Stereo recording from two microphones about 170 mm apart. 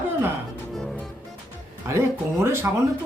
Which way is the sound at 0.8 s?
Centre (ahead or behind).